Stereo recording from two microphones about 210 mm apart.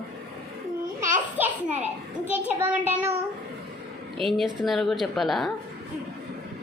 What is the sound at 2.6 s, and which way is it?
Child singing, 10° right (ahead or behind).